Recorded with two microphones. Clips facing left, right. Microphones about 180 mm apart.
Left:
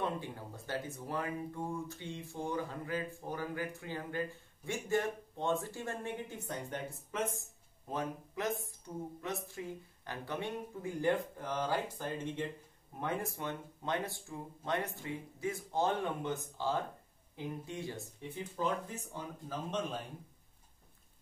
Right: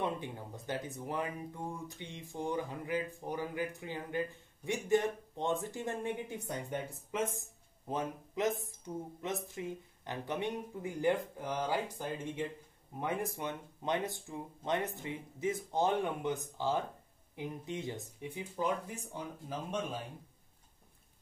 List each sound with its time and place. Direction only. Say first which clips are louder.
0.0 s speech: right 1 dB; 20° right (ahead or behind)